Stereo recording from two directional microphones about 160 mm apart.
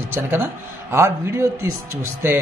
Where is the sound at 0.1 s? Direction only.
15° right (ahead or behind).